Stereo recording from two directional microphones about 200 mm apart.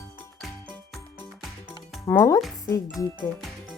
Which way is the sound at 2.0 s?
15° left (ahead or behind).